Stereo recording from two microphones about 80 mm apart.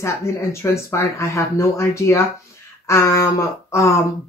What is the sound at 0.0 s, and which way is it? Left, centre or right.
Speech, left.